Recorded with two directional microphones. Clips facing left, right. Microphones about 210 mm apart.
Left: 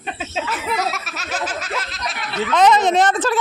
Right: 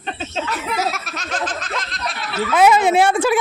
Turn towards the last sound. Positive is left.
turn(degrees=-10)  # may be behind; listen again after turning